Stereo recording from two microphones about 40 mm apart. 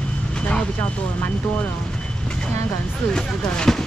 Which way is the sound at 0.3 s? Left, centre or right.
Left.